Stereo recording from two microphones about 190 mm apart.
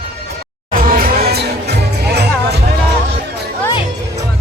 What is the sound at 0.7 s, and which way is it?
Music, 50° right (ahead or behind).